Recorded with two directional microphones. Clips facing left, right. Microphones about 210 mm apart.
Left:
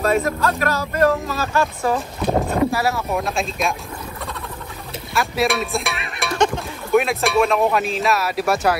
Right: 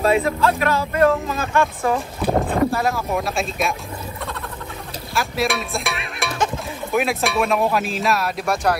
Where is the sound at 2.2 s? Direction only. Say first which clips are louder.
Even; centre (ahead or behind).